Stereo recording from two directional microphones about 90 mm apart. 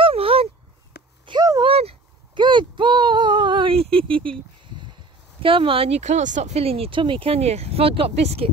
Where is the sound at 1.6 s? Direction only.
90° right; by 4.3 s 75° right (ahead or behind).